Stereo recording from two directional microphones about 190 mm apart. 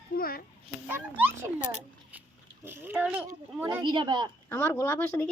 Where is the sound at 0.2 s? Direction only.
50° left (ahead or behind).